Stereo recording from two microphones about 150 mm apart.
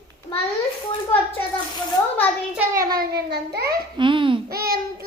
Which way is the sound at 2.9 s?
90° right.